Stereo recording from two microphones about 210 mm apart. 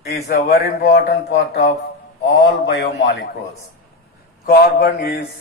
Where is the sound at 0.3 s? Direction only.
45° left (ahead or behind).